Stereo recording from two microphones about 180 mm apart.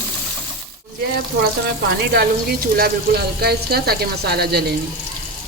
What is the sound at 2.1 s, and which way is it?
Speech, 60° right (ahead or behind).